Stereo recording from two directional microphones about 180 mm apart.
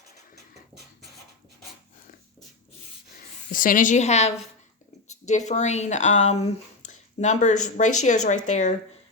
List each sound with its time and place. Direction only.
3.5 s speech: 50° left (ahead or behind)